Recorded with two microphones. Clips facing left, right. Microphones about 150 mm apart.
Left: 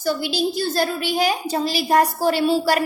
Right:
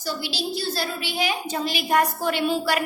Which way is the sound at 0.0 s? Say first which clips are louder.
Left 7 dB; 50° left (ahead or behind).